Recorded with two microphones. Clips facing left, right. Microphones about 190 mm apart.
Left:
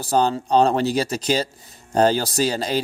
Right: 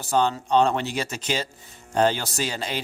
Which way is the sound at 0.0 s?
35° left (ahead or behind).